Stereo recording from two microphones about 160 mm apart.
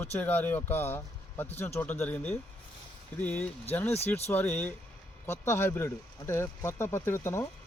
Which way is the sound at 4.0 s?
40° left (ahead or behind).